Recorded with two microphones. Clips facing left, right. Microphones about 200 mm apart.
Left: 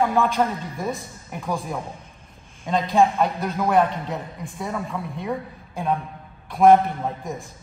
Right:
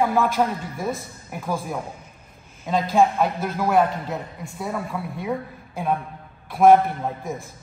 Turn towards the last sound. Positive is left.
turn(degrees=0)  # may be behind; listen again after turning